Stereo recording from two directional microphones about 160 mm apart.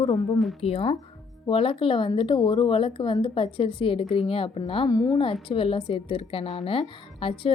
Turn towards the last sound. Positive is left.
turn(degrees=35)  # may be behind; listen again after turning